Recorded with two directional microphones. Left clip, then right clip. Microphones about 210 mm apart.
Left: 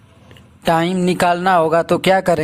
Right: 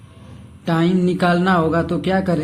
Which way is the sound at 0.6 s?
40° left (ahead or behind).